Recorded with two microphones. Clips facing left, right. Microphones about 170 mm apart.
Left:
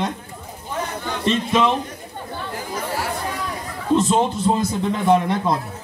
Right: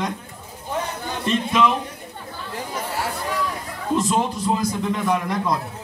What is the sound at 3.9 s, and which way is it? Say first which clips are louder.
Speech: left 3 dB; 25° left (ahead or behind).